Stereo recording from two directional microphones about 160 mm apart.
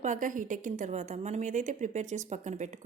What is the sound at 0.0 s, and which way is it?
A woman's voice, 55° right (ahead or behind).